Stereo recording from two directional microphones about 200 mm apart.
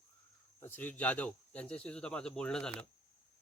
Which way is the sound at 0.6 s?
10° left (ahead or behind).